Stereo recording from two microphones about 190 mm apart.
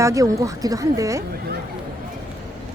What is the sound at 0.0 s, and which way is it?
Speech, 15° right (ahead or behind).